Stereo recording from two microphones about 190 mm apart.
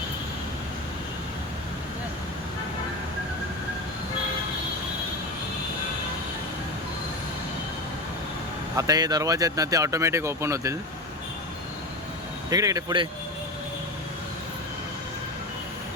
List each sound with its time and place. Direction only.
8.7 s speech: 20° right (ahead or behind)
12.5 s speech: 20° right (ahead or behind)